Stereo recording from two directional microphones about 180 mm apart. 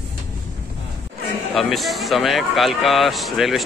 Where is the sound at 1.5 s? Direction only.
Centre (ahead or behind).